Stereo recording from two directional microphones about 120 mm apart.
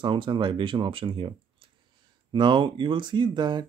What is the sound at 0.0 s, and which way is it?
Speech, 45° right (ahead or behind).